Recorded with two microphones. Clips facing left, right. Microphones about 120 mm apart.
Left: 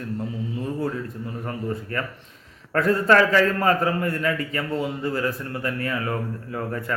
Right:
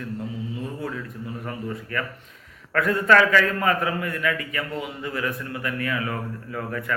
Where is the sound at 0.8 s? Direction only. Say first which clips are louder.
Left 4 dB; 30° left (ahead or behind).